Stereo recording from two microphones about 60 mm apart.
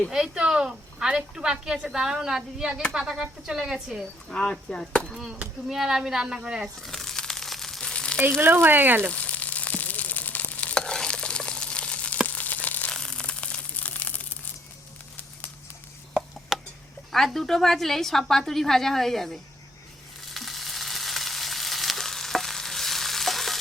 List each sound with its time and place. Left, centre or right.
0.1 s a woman's voice: centre
4.3 s chop: centre
5.1 s a woman's voice: centre
6.8 s crumpling: centre
8.4 s speech: right
9.1 s frying: left
12.3 s a sound: left
12.9 s a sound: centre
16.5 s a sound: centre
17.1 s a woman's voice: centre
20.3 s frying: centre